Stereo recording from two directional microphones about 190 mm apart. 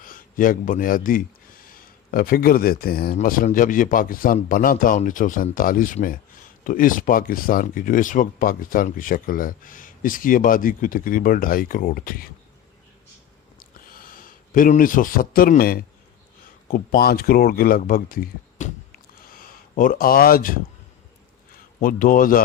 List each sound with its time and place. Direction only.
0.0 s speech: 45° left (ahead or behind)
13.6 s a sound: 50° left (ahead or behind)
16.6 s a man's voice: 45° left (ahead or behind)